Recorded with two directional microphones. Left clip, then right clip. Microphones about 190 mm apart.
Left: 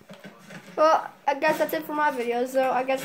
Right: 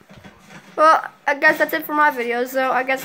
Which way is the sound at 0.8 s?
15° right (ahead or behind).